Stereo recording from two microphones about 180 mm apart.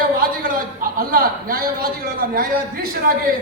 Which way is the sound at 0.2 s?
55° right (ahead or behind).